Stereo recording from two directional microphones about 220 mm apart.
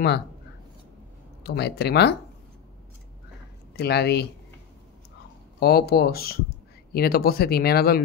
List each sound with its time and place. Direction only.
1.4 s speech: 50° left (ahead or behind)
3.7 s speech: 50° left (ahead or behind)
5.6 s speech: 45° left (ahead or behind)